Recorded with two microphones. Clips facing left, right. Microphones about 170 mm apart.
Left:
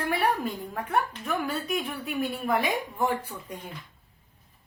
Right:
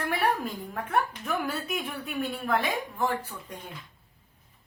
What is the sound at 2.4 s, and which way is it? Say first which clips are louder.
Speech: left 1 dB; 10° left (ahead or behind).